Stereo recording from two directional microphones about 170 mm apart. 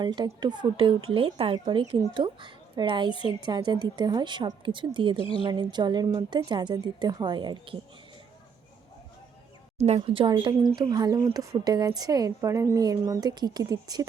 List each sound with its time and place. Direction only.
0.0 s speech: 25° right (ahead or behind)
5.1 s a woman's voice: 30° left (ahead or behind)
5.4 s speech: 25° right (ahead or behind)
9.8 s speech: 35° right (ahead or behind)